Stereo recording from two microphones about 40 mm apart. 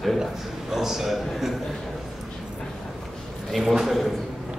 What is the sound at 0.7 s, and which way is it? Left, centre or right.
Speech, centre.